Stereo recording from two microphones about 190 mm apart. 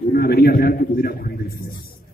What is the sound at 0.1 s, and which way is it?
A man's voice, 55° left (ahead or behind).